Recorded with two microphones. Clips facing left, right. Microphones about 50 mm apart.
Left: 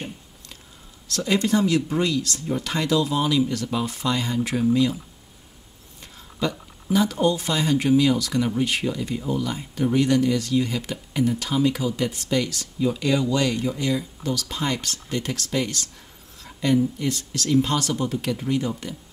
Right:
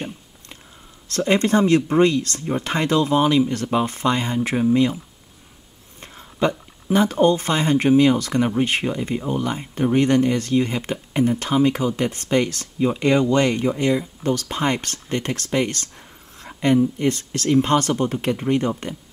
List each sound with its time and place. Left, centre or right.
1.0 s speech: right
5.9 s speech: right